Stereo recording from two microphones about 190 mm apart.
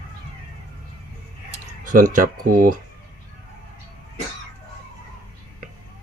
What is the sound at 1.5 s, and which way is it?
Speech, 45° right (ahead or behind).